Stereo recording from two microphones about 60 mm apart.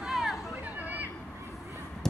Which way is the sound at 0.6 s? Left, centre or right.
Right.